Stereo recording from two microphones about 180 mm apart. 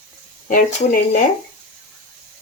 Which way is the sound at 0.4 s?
50° left (ahead or behind).